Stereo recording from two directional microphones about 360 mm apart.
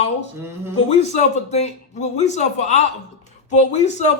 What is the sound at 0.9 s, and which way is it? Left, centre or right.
A man's voice, centre.